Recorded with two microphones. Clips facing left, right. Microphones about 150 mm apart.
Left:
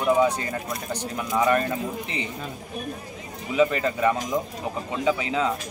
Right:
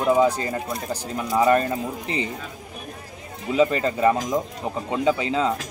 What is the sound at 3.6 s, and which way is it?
A man's voice, 30° right (ahead or behind).